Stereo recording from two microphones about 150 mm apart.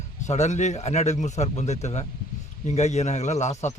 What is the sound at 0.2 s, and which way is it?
A man's voice, 50° left (ahead or behind).